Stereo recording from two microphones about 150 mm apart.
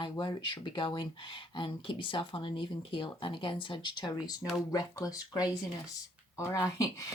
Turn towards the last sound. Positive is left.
turn(degrees=20)  # may be behind; listen again after turning